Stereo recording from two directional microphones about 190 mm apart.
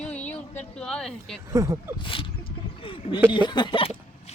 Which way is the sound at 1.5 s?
15° right (ahead or behind).